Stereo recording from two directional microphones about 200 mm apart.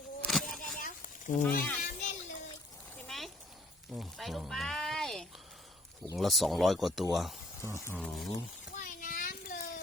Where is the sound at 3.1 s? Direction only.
Centre (ahead or behind).